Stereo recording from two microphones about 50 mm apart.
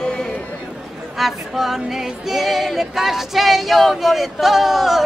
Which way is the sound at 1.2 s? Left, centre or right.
Centre.